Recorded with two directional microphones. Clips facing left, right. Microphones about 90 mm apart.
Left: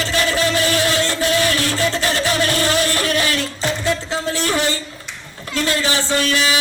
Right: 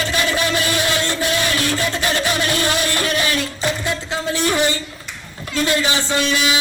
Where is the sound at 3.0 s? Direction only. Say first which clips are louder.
Left 1 dB; 20° right (ahead or behind).